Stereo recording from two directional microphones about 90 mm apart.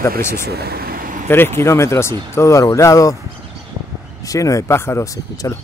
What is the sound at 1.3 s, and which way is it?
Speech, 25° left (ahead or behind).